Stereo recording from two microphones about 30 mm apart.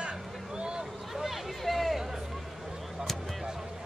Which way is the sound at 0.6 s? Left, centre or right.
Right.